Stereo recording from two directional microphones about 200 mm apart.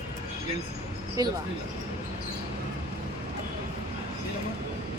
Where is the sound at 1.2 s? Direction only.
15° right (ahead or behind).